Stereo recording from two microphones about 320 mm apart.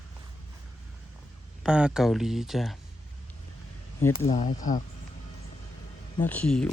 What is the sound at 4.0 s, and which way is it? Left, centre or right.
Speech, centre.